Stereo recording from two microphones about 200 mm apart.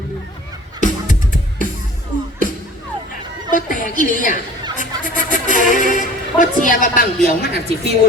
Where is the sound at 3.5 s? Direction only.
40° left (ahead or behind).